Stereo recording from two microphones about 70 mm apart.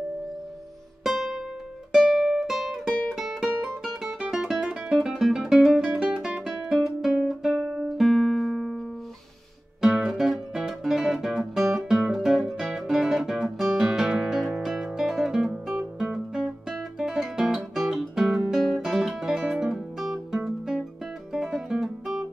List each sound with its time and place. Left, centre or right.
1.0 s music: centre
5.9 s guitar: centre
9.8 s guitar: centre
21.3 s music: centre